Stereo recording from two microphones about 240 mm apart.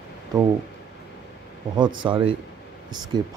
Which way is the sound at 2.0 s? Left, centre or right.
Right.